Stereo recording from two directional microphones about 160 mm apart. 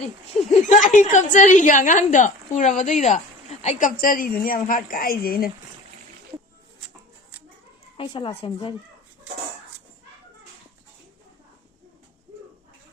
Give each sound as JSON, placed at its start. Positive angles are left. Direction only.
{"t": 0.0, "sound": "a woman's voice", "side_deg": 50}
{"t": 7.9, "sound": "speech", "side_deg": 35}